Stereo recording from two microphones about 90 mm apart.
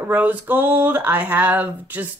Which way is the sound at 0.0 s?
20° right (ahead or behind).